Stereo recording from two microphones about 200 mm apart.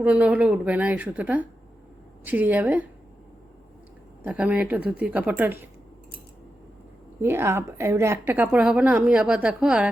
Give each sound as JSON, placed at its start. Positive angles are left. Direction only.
{"t": 0.0, "sound": "a woman's voice", "side_deg": -5}
{"t": 4.2, "sound": "a woman's voice", "side_deg": -5}
{"t": 7.2, "sound": "a woman's voice", "side_deg": -10}